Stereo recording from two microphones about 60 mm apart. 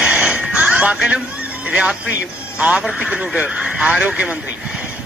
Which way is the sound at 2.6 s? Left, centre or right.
Centre.